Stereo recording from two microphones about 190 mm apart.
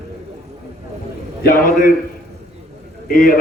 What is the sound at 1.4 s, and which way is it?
Speech, 45° left (ahead or behind).